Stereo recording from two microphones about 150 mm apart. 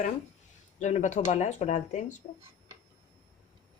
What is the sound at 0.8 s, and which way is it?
Speech, 50° left (ahead or behind).